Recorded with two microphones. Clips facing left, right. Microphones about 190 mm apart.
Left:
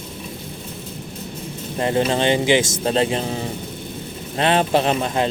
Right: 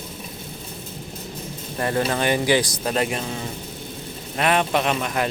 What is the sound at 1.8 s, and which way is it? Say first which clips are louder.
A man's voice: left 3 dB; 20° left (ahead or behind).